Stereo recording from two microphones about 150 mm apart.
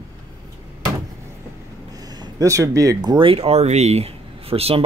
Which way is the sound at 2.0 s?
25° right (ahead or behind).